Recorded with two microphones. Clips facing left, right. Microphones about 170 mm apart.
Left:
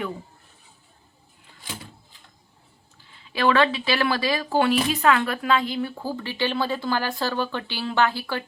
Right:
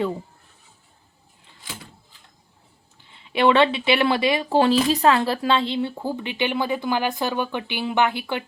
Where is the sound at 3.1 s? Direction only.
25° right (ahead or behind).